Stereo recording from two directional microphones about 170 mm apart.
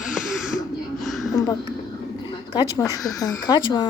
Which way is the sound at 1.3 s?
20° left (ahead or behind).